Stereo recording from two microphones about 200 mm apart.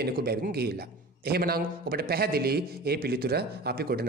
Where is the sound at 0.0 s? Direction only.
50° right (ahead or behind).